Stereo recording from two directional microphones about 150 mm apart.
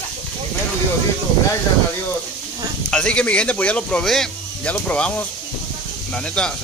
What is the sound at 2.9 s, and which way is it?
Speech, 5° left (ahead or behind).